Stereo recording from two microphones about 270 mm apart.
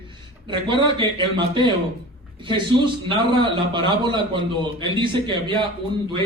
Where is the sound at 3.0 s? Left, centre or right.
Centre.